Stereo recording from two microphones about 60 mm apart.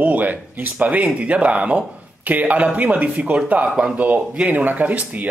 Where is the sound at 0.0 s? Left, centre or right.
Right.